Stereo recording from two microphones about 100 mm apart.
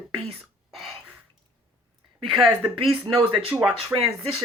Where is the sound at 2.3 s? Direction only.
5° right (ahead or behind).